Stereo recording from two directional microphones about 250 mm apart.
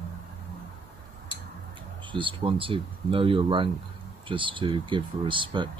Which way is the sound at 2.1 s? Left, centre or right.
Centre.